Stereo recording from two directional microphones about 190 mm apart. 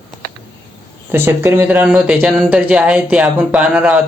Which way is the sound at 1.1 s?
10° right (ahead or behind).